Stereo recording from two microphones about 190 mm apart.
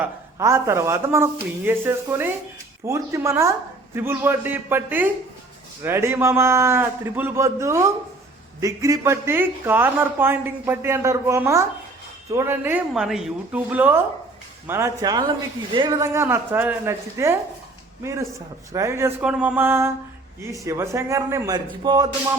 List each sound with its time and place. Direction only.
0.0 s speech: 15° right (ahead or behind)
12.9 s speech: centre (ahead or behind); by 22.0 s 20° right (ahead or behind)